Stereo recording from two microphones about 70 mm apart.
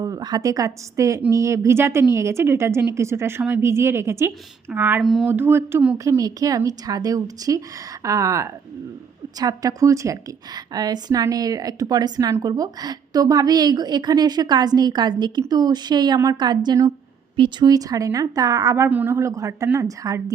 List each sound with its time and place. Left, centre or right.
0.0 s a woman's voice: right
4.7 s speech: right
5.0 s a sound: centre
5.3 s a woman's voice: right
6.0 s a woman's voice: right
10.5 s a woman's voice: right
16.2 s speech: right
17.6 s speech: right
18.9 s a woman's voice: right
19.3 s a woman's voice: right
19.6 s a woman's voice: right